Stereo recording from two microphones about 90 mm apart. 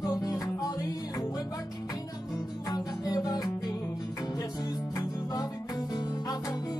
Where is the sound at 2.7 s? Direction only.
45° left (ahead or behind).